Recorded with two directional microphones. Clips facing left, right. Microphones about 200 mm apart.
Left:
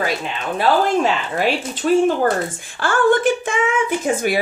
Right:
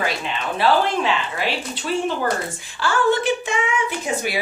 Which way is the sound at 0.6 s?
45° left (ahead or behind).